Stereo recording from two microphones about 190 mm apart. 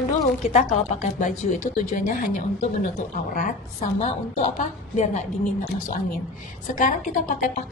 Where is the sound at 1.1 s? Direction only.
40° left (ahead or behind).